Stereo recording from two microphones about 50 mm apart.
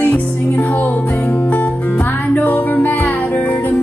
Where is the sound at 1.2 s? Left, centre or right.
Left.